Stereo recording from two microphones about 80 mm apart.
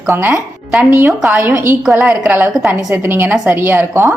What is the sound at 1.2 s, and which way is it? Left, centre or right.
A woman's voice, right.